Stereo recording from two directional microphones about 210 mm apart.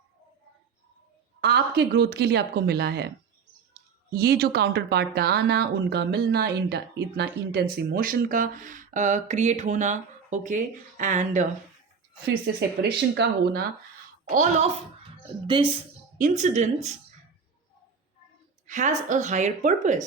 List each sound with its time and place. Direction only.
1.4 s speech: 50° right (ahead or behind)
4.1 s speech: 45° right (ahead or behind)
12.2 s speech: 45° right (ahead or behind)
14.3 s a woman's voice: 35° right (ahead or behind)
15.4 s a woman's voice: 25° right (ahead or behind)
16.1 s a woman's voice: 35° right (ahead or behind)
18.6 s a woman's voice: 35° right (ahead or behind)